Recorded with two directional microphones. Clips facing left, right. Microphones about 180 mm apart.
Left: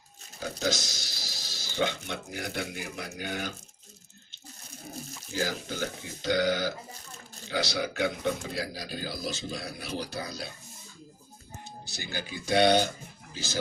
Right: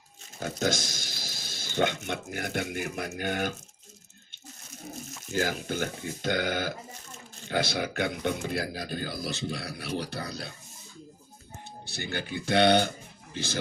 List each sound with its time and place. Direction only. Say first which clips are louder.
0.3 s a sound: right 2 dB; 50° right (ahead or behind)
2.0 s a man's voice: right 3 dB; 55° right (ahead or behind)
5.3 s a man's voice: right 3 dB; 55° right (ahead or behind)
11.9 s a man's voice: right 4 dB; 60° right (ahead or behind)